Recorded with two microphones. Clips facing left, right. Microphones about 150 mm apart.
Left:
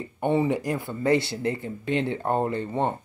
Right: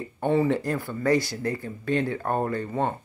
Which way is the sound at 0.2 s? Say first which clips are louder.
Right 1 dB; 20° left (ahead or behind).